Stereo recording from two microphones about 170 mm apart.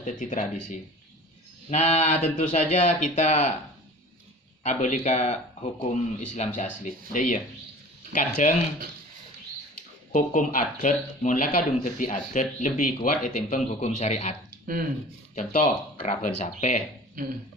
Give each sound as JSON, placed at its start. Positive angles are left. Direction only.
{"t": 0.0, "sound": "speech", "side_deg": 45}
{"t": 4.6, "sound": "speech", "side_deg": 45}
{"t": 8.4, "sound": "speech", "side_deg": 50}
{"t": 10.1, "sound": "speech", "side_deg": 50}
{"t": 13.7, "sound": "a man's voice", "side_deg": 40}
{"t": 16.0, "sound": "speech", "side_deg": 45}
{"t": 17.2, "sound": "speech", "side_deg": -60}